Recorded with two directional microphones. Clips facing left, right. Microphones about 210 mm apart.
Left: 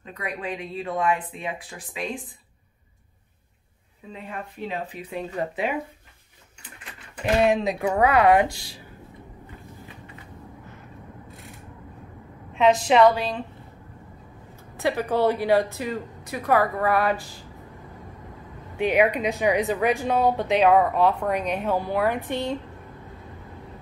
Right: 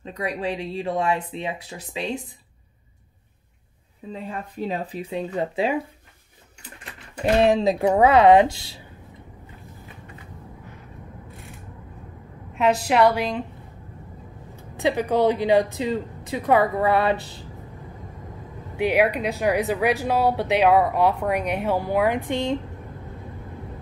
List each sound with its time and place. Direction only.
0.0 s speech: 30° right (ahead or behind)
4.1 s a woman's voice: 35° right (ahead or behind)
5.1 s speech: 25° right (ahead or behind)
7.4 s speech: 30° right (ahead or behind)
12.8 s speech: 10° right (ahead or behind)
14.8 s speech: 15° right (ahead or behind)
18.8 s speech: 10° right (ahead or behind)